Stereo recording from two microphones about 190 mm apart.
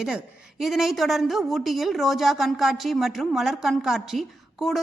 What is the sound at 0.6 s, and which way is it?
Speech, centre (ahead or behind).